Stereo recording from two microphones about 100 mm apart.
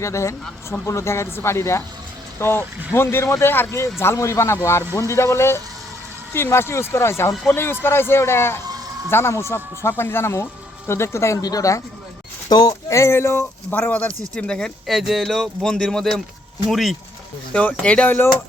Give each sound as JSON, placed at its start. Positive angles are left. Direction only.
{"t": 0.0, "sound": "speech", "side_deg": 30}
{"t": 13.0, "sound": "speech", "side_deg": 25}
{"t": 17.5, "sound": "speech", "side_deg": 15}